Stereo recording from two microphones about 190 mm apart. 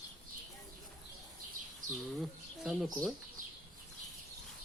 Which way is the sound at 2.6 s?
Centre (ahead or behind).